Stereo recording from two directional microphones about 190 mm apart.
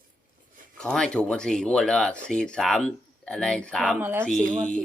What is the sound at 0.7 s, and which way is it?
Speech, 5° left (ahead or behind).